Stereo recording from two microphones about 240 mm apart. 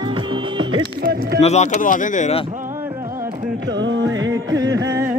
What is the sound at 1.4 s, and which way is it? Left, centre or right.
Speech, left.